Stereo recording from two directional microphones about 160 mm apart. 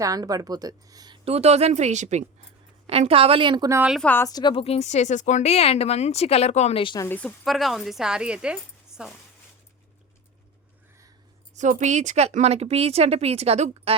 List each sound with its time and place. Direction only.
0.0 s speech: 20° right (ahead or behind)
4.0 s speech: 10° left (ahead or behind)
4.3 s speech: 25° left (ahead or behind)
7.0 s speech: 10° left (ahead or behind)
11.5 s speech: 50° right (ahead or behind)